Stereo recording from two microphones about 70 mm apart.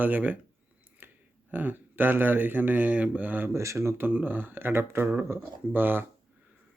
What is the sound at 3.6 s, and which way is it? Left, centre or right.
Speech, right.